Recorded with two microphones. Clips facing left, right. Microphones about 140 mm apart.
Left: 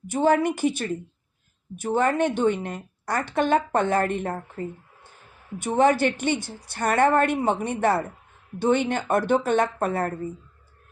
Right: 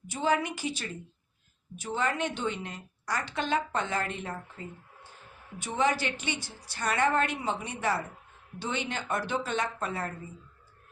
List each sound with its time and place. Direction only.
0.1 s a woman's voice: 50° left (ahead or behind)